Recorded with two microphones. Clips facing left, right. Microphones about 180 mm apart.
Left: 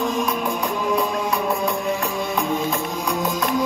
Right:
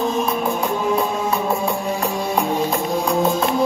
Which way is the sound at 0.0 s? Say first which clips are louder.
Right 2 dB; 25° right (ahead or behind).